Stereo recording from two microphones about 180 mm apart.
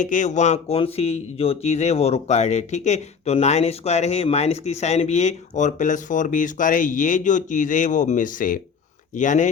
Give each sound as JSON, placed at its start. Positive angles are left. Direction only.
{"t": 0.0, "sound": "speech", "side_deg": 45}